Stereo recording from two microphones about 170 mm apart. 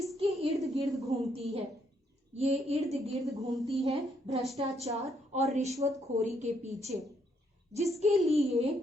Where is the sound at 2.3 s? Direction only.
40° right (ahead or behind).